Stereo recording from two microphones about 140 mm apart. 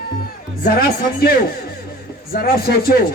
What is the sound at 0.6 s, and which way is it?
Speech, 90° left.